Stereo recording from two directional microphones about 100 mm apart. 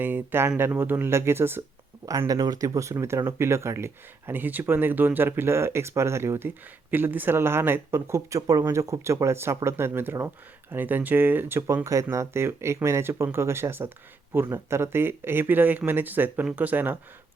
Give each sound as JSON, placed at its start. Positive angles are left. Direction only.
{"t": 0.0, "sound": "speech", "side_deg": -20}
{"t": 2.0, "sound": "speech", "side_deg": -35}